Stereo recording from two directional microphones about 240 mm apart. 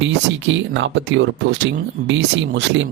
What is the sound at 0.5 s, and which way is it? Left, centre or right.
Speech, right.